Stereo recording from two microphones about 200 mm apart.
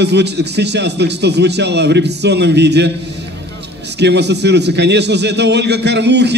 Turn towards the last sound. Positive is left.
turn(degrees=-60)  # may be behind; listen again after turning